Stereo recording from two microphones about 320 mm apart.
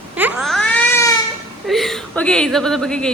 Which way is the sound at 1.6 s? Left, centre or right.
Centre.